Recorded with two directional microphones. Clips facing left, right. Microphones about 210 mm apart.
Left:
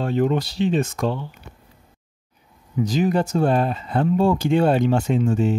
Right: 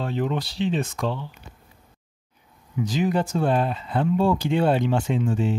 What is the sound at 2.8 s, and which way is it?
Speech, 40° left (ahead or behind).